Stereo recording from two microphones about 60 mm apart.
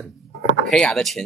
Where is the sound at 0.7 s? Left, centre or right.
Centre.